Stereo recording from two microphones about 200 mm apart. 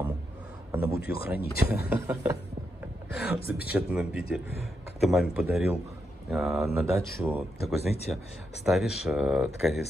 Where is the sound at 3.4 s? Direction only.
50° left (ahead or behind).